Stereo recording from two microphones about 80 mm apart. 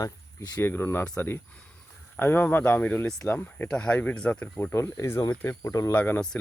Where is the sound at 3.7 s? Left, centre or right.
Centre.